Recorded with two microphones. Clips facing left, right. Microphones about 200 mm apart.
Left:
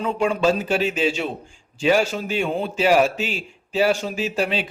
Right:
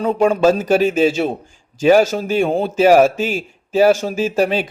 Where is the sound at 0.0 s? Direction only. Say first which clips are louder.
Right 6 dB; 45° right (ahead or behind).